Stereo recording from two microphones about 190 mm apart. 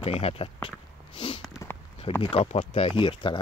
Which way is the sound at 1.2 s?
25° left (ahead or behind).